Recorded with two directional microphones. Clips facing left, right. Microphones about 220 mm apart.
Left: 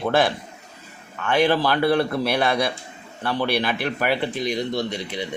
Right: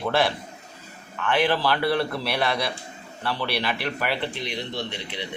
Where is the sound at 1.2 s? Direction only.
45° left (ahead or behind).